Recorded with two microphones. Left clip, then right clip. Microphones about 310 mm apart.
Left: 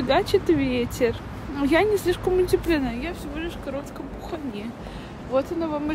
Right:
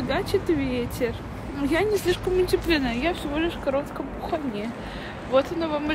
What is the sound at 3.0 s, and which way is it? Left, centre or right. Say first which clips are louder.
Speech: right 6 dB; centre.